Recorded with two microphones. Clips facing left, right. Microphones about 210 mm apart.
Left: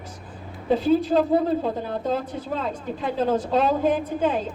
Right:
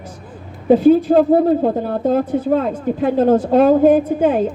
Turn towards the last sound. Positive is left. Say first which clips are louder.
# right 8 dB
turn(degrees=-55)  # may be behind; listen again after turning